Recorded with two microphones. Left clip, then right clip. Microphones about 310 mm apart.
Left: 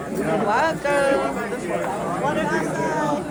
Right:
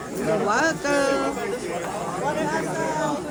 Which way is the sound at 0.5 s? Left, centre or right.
Right.